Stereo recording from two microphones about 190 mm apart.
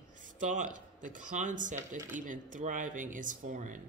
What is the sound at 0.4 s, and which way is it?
A woman's voice, 40° right (ahead or behind).